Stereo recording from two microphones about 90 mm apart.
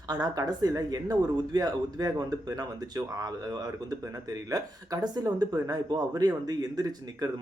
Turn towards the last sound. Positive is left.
turn(degrees=-45)  # may be behind; listen again after turning